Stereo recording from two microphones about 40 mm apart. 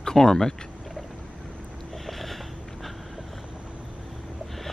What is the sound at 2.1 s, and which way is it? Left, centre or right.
Sniff, centre.